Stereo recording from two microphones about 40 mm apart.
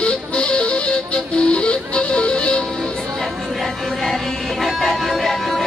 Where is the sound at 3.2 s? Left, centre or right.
Centre.